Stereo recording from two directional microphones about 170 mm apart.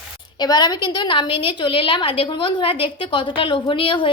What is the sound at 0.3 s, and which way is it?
A woman's voice, 25° left (ahead or behind).